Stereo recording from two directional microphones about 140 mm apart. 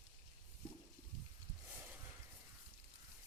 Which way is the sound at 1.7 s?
10° right (ahead or behind).